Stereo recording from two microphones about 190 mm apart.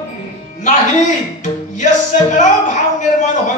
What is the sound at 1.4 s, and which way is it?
Music, 40° left (ahead or behind).